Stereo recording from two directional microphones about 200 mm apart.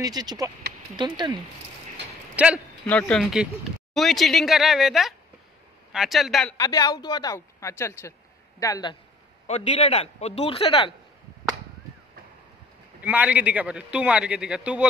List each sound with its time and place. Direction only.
0.0 s speech: 20° right (ahead or behind)
2.3 s a man's voice: 5° right (ahead or behind)
2.9 s speech: 5° left (ahead or behind)
6.5 s speech: 20° left (ahead or behind)
9.5 s a man's voice: 30° left (ahead or behind)
13.0 s speech: 5° right (ahead or behind)